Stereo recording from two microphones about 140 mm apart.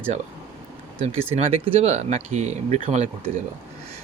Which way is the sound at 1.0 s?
45° right (ahead or behind).